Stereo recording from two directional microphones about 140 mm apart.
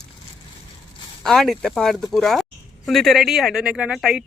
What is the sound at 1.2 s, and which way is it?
Speech, centre (ahead or behind).